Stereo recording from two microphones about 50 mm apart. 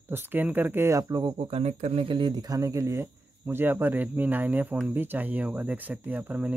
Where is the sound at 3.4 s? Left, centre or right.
Right.